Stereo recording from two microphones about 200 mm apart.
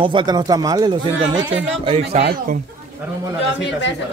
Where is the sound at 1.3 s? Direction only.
65° right (ahead or behind).